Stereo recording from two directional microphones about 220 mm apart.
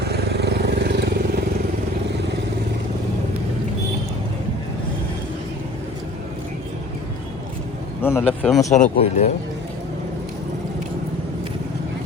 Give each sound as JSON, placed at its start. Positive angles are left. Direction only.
{"t": 0.0, "sound": "vehicle", "side_deg": -50}
{"t": 8.0, "sound": "speech", "side_deg": 10}
{"t": 8.7, "sound": "speech", "side_deg": 35}